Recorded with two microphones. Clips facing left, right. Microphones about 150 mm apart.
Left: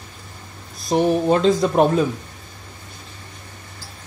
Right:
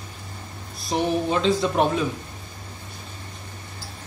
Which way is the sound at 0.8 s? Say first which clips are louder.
Left 6 dB; 45° left (ahead or behind).